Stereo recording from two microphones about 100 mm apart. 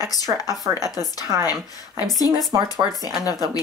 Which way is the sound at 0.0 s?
40° left (ahead or behind).